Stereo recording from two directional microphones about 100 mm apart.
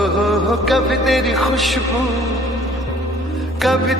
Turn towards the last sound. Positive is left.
turn(degrees=0)  # may be behind; listen again after turning